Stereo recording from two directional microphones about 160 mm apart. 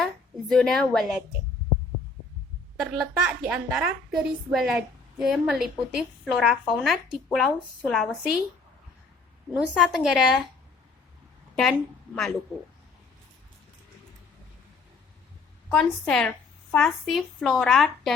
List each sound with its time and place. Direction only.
0.0 s a sound: centre (ahead or behind)
3.2 s a woman's voice: 5° right (ahead or behind)
9.5 s a woman's voice: 5° right (ahead or behind)
11.5 s a woman's voice: centre (ahead or behind)
15.7 s a woman's voice: 5° left (ahead or behind)